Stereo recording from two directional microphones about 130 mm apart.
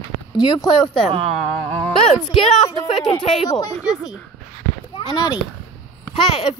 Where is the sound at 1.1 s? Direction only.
50° right (ahead or behind).